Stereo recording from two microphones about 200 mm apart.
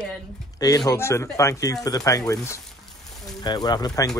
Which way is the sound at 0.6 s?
15° left (ahead or behind).